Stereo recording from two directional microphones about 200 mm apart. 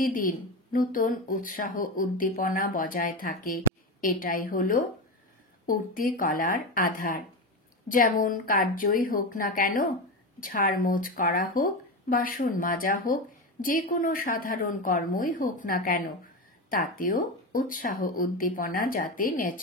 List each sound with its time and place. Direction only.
0.0 s speech: 45° left (ahead or behind)